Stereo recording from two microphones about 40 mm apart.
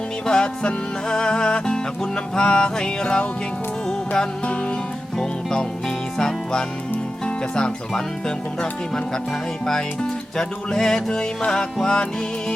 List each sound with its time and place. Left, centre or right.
0.3 s music: left
5.1 s music: centre
9.6 s music: centre